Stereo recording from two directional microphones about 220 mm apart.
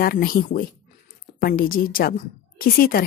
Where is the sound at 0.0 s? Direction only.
40° left (ahead or behind).